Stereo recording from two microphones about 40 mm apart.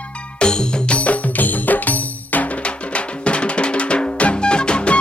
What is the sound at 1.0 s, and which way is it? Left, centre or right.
Music, left.